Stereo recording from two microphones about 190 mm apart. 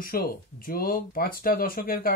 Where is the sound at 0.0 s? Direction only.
50° left (ahead or behind).